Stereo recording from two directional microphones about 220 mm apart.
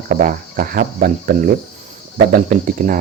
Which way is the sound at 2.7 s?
35° right (ahead or behind).